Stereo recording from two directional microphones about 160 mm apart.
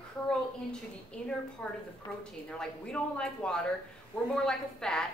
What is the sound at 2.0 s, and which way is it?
Speech, 30° left (ahead or behind).